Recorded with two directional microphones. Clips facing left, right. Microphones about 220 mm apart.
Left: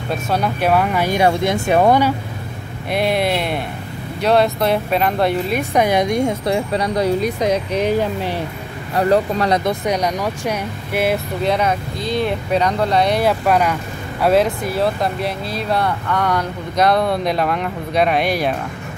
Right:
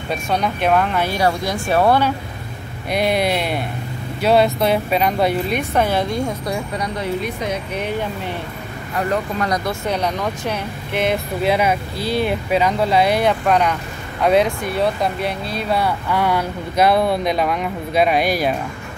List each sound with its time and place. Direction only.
0.1 s speech: 5° left (ahead or behind)
2.9 s speech: centre (ahead or behind)
5.6 s speech: 15° left (ahead or behind); by 9.6 s 35° left (ahead or behind)
9.7 s speech: 15° left (ahead or behind)
11.4 s speech: 5° right (ahead or behind)